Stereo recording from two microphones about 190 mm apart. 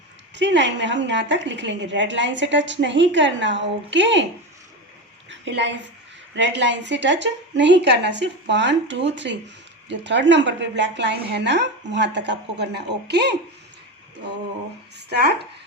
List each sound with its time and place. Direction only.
0.3 s a woman's voice: 70° right (ahead or behind)
5.3 s a sound: 70° right (ahead or behind)
6.3 s a woman's voice: 70° right (ahead or behind)
14.9 s speech: 60° right (ahead or behind)